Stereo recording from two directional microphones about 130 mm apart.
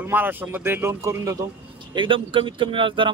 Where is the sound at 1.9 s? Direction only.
40° right (ahead or behind).